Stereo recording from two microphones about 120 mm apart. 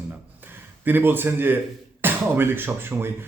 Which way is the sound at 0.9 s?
15° right (ahead or behind).